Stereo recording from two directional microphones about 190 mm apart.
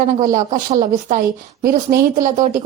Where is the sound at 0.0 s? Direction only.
45° right (ahead or behind).